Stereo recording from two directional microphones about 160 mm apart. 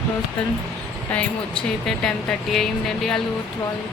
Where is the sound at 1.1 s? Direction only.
10° left (ahead or behind).